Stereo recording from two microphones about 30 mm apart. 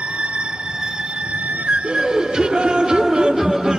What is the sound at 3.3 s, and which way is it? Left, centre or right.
Music, centre.